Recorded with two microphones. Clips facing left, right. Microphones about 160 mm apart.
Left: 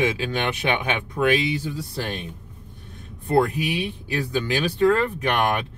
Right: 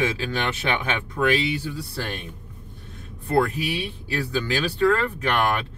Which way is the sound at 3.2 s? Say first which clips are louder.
Left 2 dB; 20° left (ahead or behind).